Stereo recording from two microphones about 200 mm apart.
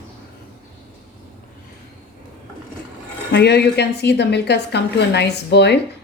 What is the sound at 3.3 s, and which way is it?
A woman's voice, 55° left (ahead or behind).